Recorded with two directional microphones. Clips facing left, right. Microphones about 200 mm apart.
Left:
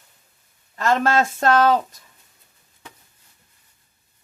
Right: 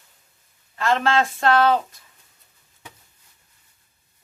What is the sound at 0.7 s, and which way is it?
Speech, 45° left (ahead or behind).